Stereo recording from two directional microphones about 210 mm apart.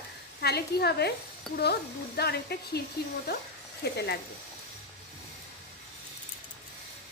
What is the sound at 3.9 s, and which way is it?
Speech, 50° left (ahead or behind).